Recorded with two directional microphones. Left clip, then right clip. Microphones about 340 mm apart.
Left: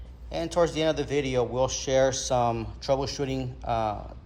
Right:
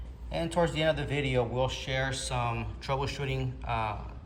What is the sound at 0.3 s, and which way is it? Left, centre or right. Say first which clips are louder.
Speech: left 4 dB; centre.